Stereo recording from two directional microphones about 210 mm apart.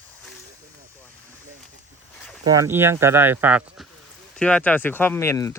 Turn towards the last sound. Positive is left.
turn(degrees=15)  # may be behind; listen again after turning